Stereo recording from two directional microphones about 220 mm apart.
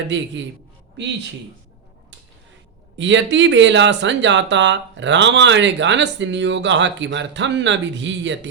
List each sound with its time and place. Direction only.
0.1 s a man's voice: 55° right (ahead or behind)
3.0 s speech: 55° right (ahead or behind)